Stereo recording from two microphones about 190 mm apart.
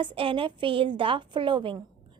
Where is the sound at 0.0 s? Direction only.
25° right (ahead or behind).